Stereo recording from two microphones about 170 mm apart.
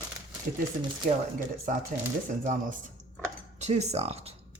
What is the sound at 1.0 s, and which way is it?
Speech, 50° right (ahead or behind).